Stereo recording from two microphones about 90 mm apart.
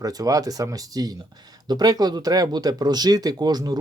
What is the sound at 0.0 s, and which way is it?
Speech, 45° right (ahead or behind).